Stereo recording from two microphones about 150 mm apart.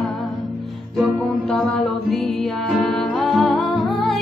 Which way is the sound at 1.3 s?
5° left (ahead or behind).